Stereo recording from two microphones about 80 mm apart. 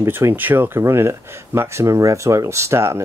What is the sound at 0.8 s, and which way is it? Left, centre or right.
Speech, right.